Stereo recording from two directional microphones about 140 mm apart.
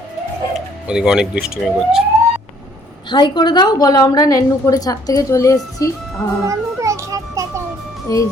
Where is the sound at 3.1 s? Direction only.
35° left (ahead or behind).